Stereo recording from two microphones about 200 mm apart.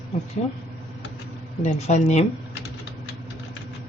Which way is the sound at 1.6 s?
35° left (ahead or behind).